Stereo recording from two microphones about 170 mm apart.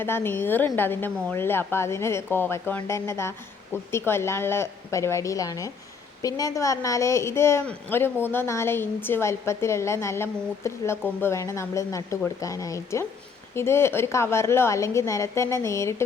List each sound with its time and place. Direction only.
0.0 s a woman's voice: 15° left (ahead or behind)